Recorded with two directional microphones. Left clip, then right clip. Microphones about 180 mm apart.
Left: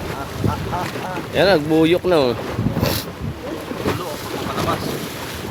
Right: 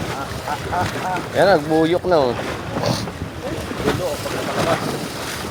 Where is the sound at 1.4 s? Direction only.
30° left (ahead or behind).